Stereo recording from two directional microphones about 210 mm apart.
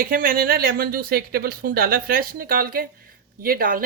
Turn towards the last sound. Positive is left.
turn(degrees=-40)  # may be behind; listen again after turning